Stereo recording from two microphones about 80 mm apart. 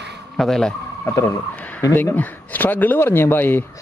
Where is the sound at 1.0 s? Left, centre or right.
Left.